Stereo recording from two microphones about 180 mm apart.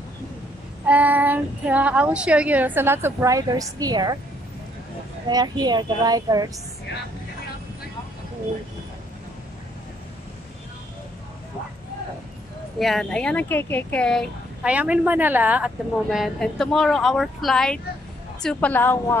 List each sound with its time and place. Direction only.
0.8 s speech: 10° right (ahead or behind)
5.3 s speech: 20° right (ahead or behind)
12.7 s a woman's voice: centre (ahead or behind)
14.7 s a woman's voice: 5° right (ahead or behind); by 19.1 s 10° left (ahead or behind)